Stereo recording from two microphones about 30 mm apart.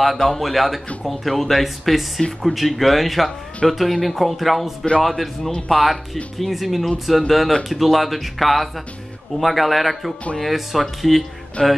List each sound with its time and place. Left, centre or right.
0.0 s speech: centre
11.6 s music: left